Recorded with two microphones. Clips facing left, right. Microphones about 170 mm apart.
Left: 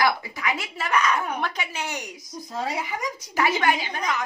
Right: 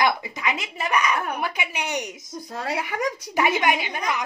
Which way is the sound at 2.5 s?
65° right (ahead or behind).